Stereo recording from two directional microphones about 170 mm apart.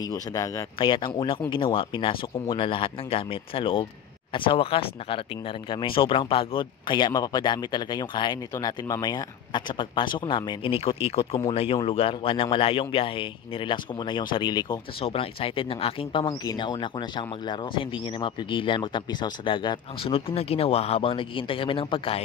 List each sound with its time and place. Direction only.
0.1 s speech: 20° left (ahead or behind)